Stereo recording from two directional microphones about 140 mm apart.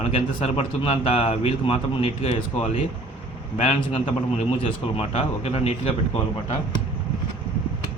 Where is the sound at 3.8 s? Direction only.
40° left (ahead or behind).